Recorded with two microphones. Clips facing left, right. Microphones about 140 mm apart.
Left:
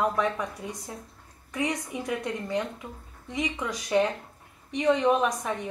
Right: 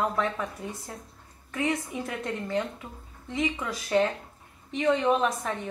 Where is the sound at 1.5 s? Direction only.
15° left (ahead or behind).